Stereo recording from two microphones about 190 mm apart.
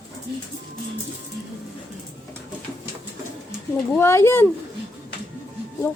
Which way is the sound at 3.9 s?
15° left (ahead or behind).